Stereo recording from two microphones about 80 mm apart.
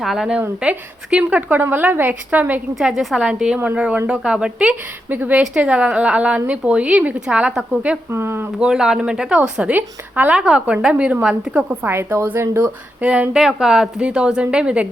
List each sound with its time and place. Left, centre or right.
0.0 s a woman's voice: centre
0.6 s a woman's voice: centre
2.7 s a woman's voice: centre
5.0 s a woman's voice: right
5.4 s a woman's voice: centre
8.1 s speech: right
8.5 s a woman's voice: centre
11.7 s a woman's voice: right
13.3 s a woman's voice: centre